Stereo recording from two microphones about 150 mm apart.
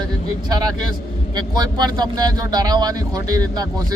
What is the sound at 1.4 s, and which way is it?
Speech, 25° right (ahead or behind).